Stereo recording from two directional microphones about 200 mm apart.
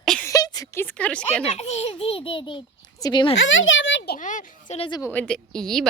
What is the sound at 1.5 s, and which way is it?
A child's voice, 30° left (ahead or behind).